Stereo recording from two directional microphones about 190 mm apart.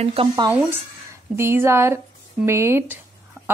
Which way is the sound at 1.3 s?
15° right (ahead or behind).